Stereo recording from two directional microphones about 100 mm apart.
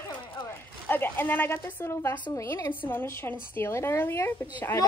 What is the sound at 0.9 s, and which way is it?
A woman's voice, 20° left (ahead or behind).